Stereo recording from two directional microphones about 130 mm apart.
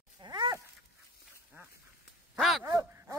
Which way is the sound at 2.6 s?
25° right (ahead or behind).